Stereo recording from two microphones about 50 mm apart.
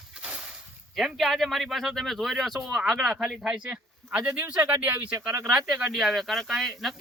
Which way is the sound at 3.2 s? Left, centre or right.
Centre.